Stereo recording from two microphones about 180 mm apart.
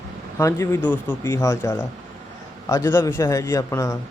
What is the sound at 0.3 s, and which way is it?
Speech, 15° left (ahead or behind).